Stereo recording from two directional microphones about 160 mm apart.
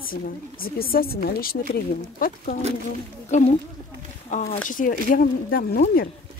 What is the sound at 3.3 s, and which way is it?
Speech, 50° left (ahead or behind).